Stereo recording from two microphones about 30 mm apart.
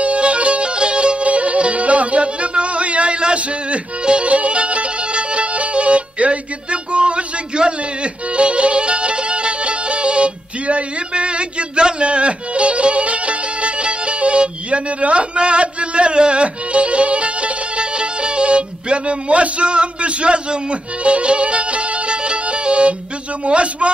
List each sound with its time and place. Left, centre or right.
0.0 s music: right
1.2 s music: right
4.0 s music: right
4.3 s music: right
23.4 s a man's voice: right